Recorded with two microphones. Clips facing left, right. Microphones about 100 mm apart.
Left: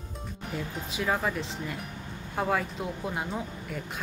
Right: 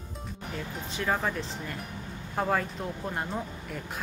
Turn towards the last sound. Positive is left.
turn(degrees=0)  # may be behind; listen again after turning